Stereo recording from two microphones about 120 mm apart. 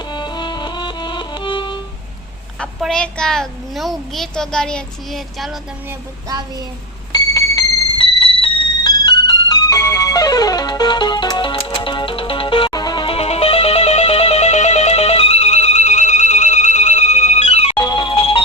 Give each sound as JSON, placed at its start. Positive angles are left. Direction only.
{"t": 0.0, "sound": "music", "side_deg": 40}
{"t": 2.6, "sound": "a child's voice", "side_deg": 5}
{"t": 6.2, "sound": "a sound", "side_deg": -35}
{"t": 7.1, "sound": "music", "side_deg": 30}
{"t": 7.9, "sound": "music", "side_deg": 45}
{"t": 12.7, "sound": "music", "side_deg": 35}
{"t": 13.1, "sound": "music", "side_deg": 55}
{"t": 17.7, "sound": "music", "side_deg": 40}